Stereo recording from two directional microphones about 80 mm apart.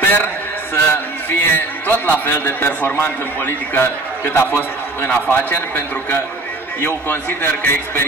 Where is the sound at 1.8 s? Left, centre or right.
Left.